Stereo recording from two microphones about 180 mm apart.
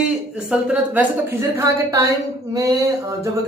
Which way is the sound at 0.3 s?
5° right (ahead or behind).